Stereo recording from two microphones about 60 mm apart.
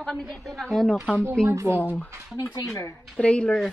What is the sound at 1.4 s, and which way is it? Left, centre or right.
Speech, centre.